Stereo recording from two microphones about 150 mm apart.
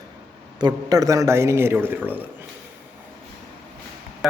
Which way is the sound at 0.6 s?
25° right (ahead or behind).